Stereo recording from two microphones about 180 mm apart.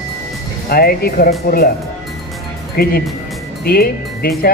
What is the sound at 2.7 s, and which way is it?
Speech, 55° left (ahead or behind).